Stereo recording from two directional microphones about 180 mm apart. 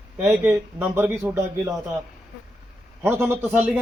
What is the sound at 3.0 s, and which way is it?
Speech, 10° right (ahead or behind).